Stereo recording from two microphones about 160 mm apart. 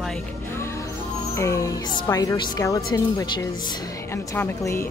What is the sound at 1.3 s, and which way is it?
A woman's voice, 20° left (ahead or behind).